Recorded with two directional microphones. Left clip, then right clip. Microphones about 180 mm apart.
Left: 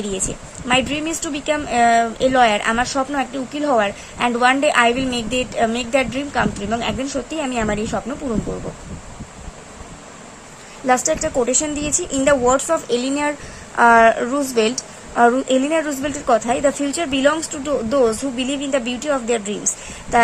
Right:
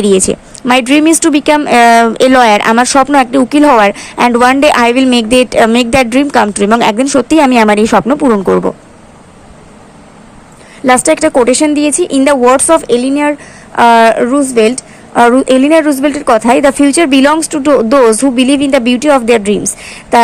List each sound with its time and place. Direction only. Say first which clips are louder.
0.0 s speech: right 16 dB; 35° right (ahead or behind)
10.8 s a woman's voice: right 10 dB; 30° right (ahead or behind)